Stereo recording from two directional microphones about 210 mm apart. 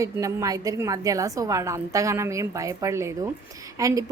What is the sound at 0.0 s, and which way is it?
A woman's voice, 15° right (ahead or behind).